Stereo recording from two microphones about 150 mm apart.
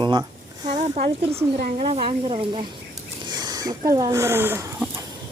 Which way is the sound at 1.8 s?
35° right (ahead or behind).